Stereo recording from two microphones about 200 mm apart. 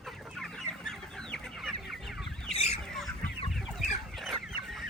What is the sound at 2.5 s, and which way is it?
Chicken, 30° left (ahead or behind).